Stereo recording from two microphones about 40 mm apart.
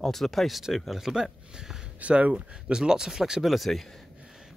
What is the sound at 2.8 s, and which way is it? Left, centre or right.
Speech, centre.